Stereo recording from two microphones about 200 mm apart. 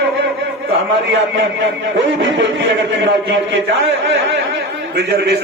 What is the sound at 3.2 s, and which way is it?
Speech, 70° right (ahead or behind).